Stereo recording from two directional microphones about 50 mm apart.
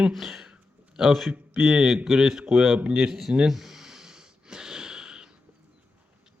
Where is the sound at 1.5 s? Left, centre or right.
Centre.